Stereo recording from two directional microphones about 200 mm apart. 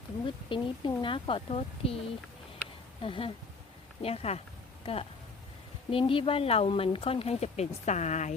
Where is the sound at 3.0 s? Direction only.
25° left (ahead or behind).